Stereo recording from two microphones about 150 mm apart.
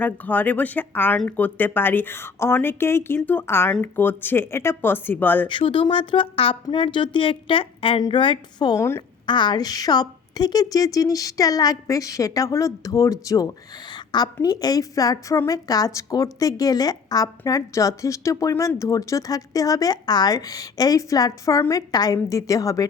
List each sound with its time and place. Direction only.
0.0 s speech: 10° left (ahead or behind)
5.5 s a woman's voice: 35° left (ahead or behind); by 9.0 s 20° left (ahead or behind)
9.2 s a woman's voice: 30° left (ahead or behind)